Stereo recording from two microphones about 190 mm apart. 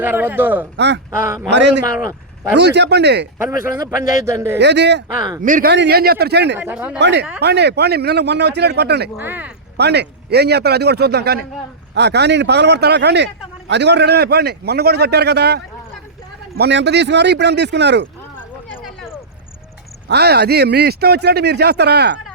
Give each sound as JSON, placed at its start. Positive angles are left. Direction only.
{"t": 0.0, "sound": "speech", "side_deg": -10}
{"t": 0.8, "sound": "speech", "side_deg": -65}
{"t": 2.0, "sound": "speech", "side_deg": -15}
{"t": 2.6, "sound": "speech", "side_deg": -65}
{"t": 3.6, "sound": "speech", "side_deg": -15}
{"t": 4.6, "sound": "speech", "side_deg": -65}
{"t": 5.4, "sound": "speech", "side_deg": -45}
{"t": 5.7, "sound": "speech", "side_deg": -60}
{"t": 6.6, "sound": "speech", "side_deg": -10}
{"t": 7.0, "sound": "speech", "side_deg": -65}
{"t": 9.1, "sound": "speech", "side_deg": -10}
{"t": 9.7, "sound": "speech", "side_deg": -60}
{"t": 18.2, "sound": "a sound", "side_deg": 10}
{"t": 20.1, "sound": "speech", "side_deg": -60}